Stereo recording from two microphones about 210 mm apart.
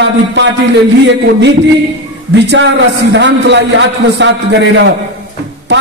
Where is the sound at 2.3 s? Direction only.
55° right (ahead or behind).